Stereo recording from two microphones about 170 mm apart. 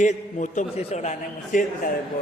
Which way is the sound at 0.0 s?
45° left (ahead or behind).